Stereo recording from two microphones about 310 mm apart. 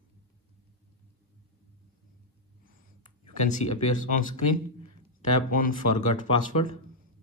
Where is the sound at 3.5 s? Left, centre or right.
Left.